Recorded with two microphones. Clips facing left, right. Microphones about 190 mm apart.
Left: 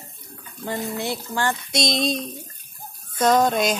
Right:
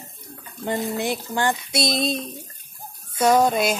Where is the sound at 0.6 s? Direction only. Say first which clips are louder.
Right 3 dB; 20° right (ahead or behind).